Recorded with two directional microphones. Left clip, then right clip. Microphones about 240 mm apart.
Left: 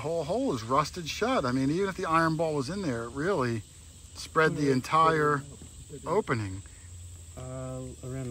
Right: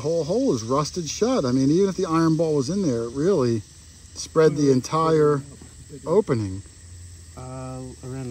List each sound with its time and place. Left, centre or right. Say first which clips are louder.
0.0 s speech: right 7 dB; right